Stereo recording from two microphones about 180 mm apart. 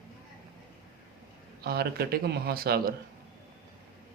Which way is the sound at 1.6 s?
60° right (ahead or behind).